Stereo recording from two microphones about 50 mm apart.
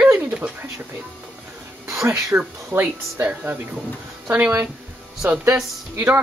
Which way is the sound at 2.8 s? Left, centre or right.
Right.